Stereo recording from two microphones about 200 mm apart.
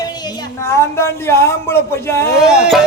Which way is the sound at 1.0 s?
15° left (ahead or behind).